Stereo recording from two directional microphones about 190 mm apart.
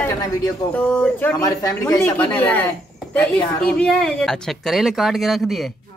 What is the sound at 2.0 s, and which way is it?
Speech, 10° left (ahead or behind).